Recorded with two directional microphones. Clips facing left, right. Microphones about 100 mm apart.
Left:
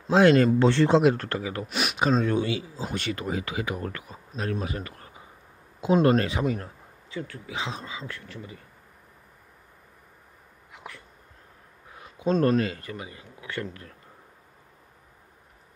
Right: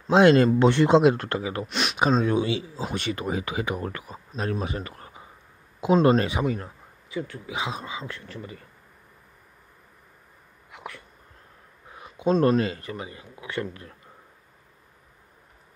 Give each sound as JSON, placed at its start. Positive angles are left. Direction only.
{"t": 0.1, "sound": "speech", "side_deg": -25}
{"t": 1.7, "sound": "speech", "side_deg": 5}
{"t": 2.0, "sound": "speech", "side_deg": -20}
{"t": 10.7, "sound": "a sound", "side_deg": -70}
{"t": 12.3, "sound": "speech", "side_deg": -5}
{"t": 12.5, "sound": "speech", "side_deg": -25}